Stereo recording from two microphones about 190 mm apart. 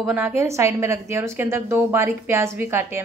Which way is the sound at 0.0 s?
10° right (ahead or behind).